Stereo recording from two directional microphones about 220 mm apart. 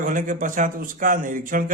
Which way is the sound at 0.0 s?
35° right (ahead or behind).